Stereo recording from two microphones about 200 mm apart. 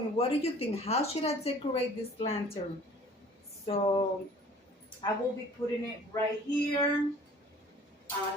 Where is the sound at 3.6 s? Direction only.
30° left (ahead or behind).